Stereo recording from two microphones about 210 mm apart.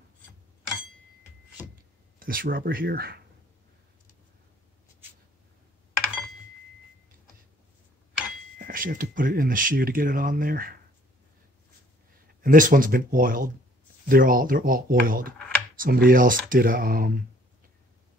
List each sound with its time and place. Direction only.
2.1 s speech: 45° right (ahead or behind)
8.5 s speech: 45° right (ahead or behind)
12.4 s speech: 40° right (ahead or behind)
15.3 s a sound: 5° left (ahead or behind)
15.8 s speech: 45° right (ahead or behind)